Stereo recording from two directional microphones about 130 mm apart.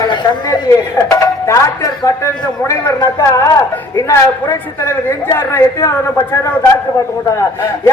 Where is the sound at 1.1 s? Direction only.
25° left (ahead or behind).